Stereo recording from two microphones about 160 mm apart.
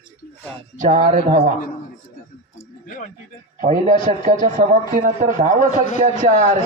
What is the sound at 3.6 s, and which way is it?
A man's voice, 50° right (ahead or behind).